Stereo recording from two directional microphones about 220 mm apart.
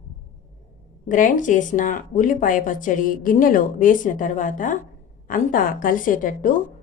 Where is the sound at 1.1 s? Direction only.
35° left (ahead or behind).